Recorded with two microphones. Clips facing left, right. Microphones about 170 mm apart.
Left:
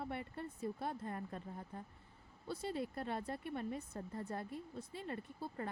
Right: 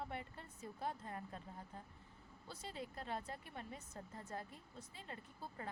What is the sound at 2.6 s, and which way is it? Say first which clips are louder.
Speech: left 7 dB; 60° left (ahead or behind).